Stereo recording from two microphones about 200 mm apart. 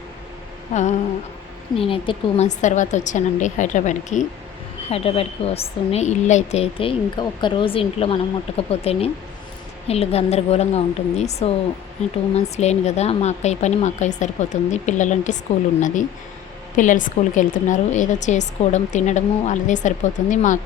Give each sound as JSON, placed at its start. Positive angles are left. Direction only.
{"t": 0.7, "sound": "a woman's voice", "side_deg": 35}
{"t": 16.7, "sound": "a woman's voice", "side_deg": 40}